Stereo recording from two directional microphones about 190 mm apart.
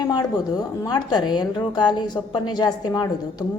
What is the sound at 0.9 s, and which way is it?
Speech, 20° left (ahead or behind).